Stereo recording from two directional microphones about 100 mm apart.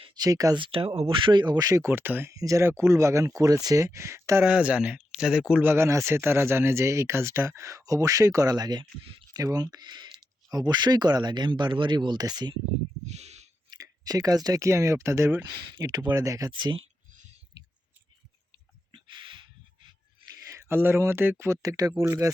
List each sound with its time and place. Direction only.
0.2 s speech: 40° right (ahead or behind)
0.6 s speech: 65° right (ahead or behind); by 1.8 s 40° right (ahead or behind)
1.8 s speech: 20° right (ahead or behind)
2.3 s speech: 35° right (ahead or behind)
4.4 s a man's voice: 10° right (ahead or behind)
5.6 s speech: 25° right (ahead or behind); by 12.5 s 45° right (ahead or behind)
13.1 s a sound: 90° right
14.0 s speech: 40° right (ahead or behind)
16.5 s speech: 50° right (ahead or behind)
18.9 s a sound: 55° right (ahead or behind)
20.5 s speech: 25° right (ahead or behind)